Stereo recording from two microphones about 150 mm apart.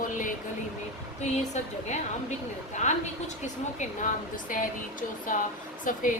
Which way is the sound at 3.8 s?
60° left (ahead or behind).